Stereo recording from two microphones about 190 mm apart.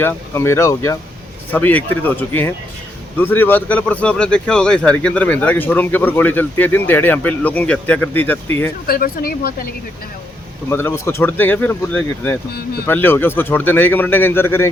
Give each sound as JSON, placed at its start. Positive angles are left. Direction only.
{"t": 0.0, "sound": "speech", "side_deg": 10}
{"t": 8.9, "sound": "speech", "side_deg": 50}
{"t": 10.7, "sound": "speech", "side_deg": 10}